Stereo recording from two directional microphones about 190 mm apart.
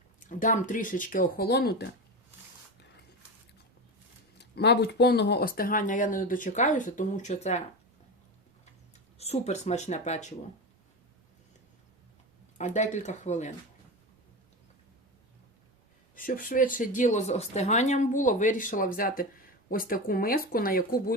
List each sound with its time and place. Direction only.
0.2 s speech: 40° left (ahead or behind)
4.4 s speech: 60° left (ahead or behind); by 7.6 s 35° left (ahead or behind)
9.1 s speech: 35° left (ahead or behind)
12.5 s speech: 40° left (ahead or behind)
16.1 s speech: 45° left (ahead or behind)